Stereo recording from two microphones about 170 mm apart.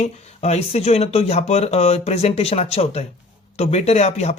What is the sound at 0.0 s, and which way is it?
Speech, 40° left (ahead or behind).